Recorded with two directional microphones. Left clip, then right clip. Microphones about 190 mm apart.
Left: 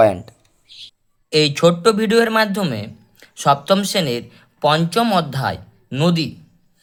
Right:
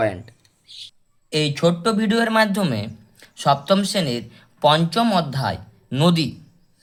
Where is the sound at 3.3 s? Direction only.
10° left (ahead or behind).